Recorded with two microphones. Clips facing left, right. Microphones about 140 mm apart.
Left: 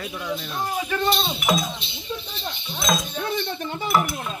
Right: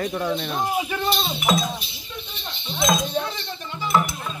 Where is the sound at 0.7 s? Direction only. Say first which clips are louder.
Left 3 dB; 10° right (ahead or behind).